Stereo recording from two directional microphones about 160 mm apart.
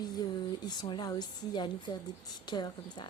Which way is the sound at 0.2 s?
25° left (ahead or behind).